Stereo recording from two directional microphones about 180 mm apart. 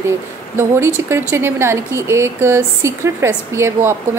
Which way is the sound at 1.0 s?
15° right (ahead or behind).